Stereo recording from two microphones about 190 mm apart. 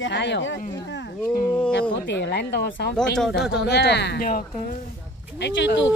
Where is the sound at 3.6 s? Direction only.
60° left (ahead or behind).